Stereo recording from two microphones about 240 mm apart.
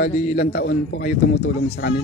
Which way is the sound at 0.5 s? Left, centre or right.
Left.